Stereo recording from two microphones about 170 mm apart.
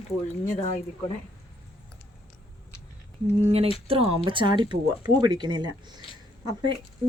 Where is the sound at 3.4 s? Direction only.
35° right (ahead or behind).